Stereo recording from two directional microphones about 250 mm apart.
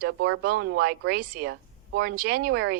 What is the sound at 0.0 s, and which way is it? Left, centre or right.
A woman's voice, right.